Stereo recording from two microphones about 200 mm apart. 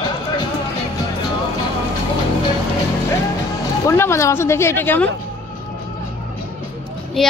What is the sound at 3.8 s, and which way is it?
Speech, 15° left (ahead or behind).